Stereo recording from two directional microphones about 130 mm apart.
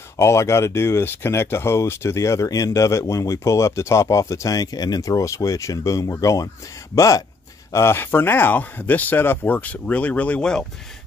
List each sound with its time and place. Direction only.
0.2 s speech: 20° left (ahead or behind)